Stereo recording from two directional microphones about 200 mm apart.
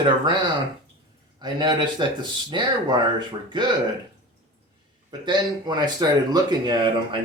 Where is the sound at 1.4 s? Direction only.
20° right (ahead or behind).